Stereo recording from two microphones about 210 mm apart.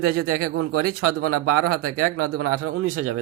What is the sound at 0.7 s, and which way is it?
Speech, 90° right.